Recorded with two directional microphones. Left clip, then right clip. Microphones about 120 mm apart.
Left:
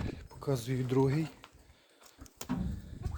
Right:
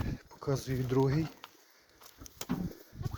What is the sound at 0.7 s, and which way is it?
Speech, 20° left (ahead or behind).